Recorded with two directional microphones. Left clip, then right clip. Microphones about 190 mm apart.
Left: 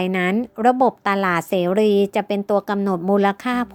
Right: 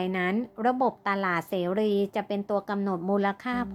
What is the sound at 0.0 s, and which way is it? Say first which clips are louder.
A woman's voice: left 7 dB; 40° left (ahead or behind).